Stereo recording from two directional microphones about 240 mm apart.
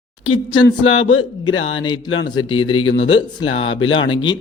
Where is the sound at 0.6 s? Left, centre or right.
Left.